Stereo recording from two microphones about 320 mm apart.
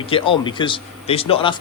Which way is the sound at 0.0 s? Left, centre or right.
Centre.